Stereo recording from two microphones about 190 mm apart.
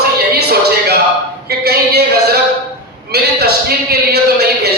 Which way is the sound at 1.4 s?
55° right (ahead or behind).